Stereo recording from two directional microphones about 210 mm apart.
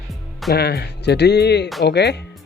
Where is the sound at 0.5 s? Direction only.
50° left (ahead or behind).